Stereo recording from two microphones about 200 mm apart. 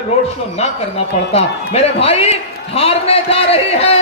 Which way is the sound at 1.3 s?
30° left (ahead or behind).